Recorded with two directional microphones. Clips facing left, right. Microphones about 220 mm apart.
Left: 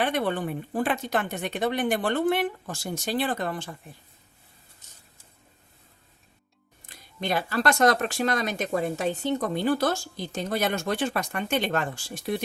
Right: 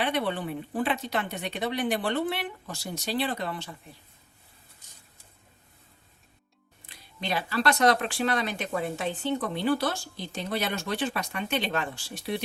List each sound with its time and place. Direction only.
0.0 s speech: 50° left (ahead or behind)
6.8 s speech: 45° left (ahead or behind)